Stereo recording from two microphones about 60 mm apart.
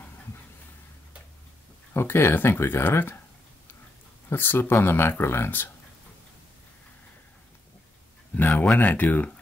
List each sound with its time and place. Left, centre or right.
2.0 s speech: left
4.3 s speech: left
8.4 s speech: left